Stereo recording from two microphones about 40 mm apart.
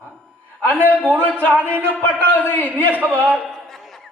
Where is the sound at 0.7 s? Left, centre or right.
Right.